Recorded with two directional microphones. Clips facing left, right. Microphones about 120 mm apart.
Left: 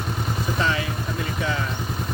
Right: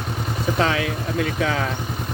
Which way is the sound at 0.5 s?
90° right.